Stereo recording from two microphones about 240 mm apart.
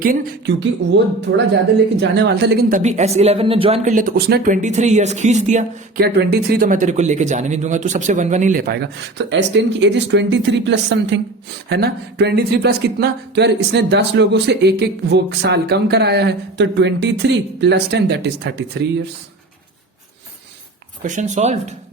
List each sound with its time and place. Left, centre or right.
0.0 s speech: right
6.1 s speech: right
21.0 s speech: right